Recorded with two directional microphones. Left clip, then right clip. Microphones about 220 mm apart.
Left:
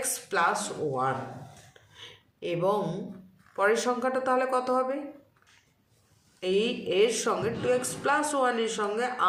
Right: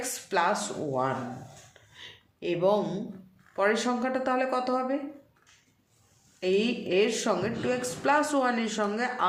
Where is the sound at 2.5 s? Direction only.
35° right (ahead or behind).